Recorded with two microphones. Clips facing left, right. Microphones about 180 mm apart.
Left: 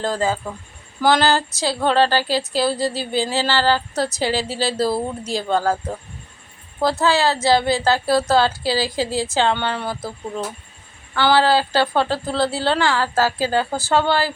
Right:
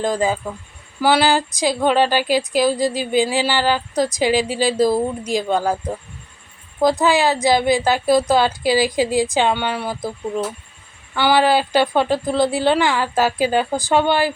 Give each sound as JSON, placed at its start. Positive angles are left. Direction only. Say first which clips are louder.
{"t": 0.0, "sound": "speech", "louder": "right 2 dB", "side_deg": -15}
{"t": 6.8, "sound": "speech", "louder": "right 2 dB", "side_deg": -15}
{"t": 11.1, "sound": "speech", "louder": "right 1 dB", "side_deg": -15}